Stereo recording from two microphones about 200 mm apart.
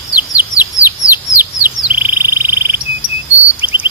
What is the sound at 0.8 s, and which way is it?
Bird, 15° left (ahead or behind).